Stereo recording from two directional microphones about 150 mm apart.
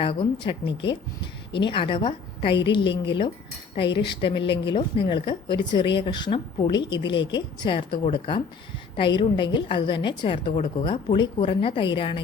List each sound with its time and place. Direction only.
0.0 s speech: 35° left (ahead or behind)